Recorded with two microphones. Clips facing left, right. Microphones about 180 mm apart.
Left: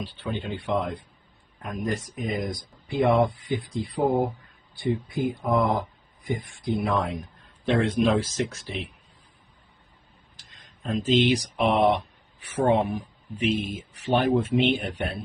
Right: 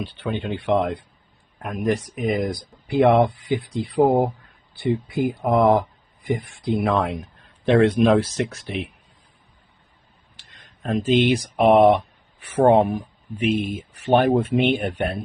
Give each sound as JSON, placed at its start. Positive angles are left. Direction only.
{"t": 0.0, "sound": "speech", "side_deg": -70}
{"t": 4.8, "sound": "speech", "side_deg": -75}
{"t": 10.3, "sound": "speech", "side_deg": -60}